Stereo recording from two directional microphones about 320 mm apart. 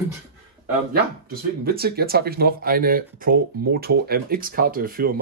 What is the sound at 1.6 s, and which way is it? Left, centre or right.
Speech, right.